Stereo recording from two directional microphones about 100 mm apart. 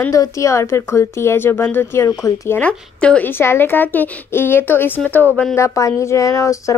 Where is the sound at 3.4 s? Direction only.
20° left (ahead or behind).